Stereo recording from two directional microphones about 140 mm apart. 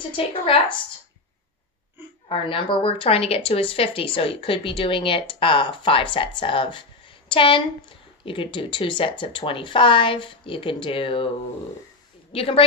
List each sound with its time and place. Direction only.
0.1 s speech: 35° left (ahead or behind)
2.2 s speech: 40° left (ahead or behind)
12.3 s a woman's voice: 40° left (ahead or behind)